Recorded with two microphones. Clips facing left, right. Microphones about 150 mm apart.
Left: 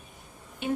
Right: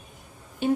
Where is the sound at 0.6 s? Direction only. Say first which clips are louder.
Right 6 dB; 35° right (ahead or behind).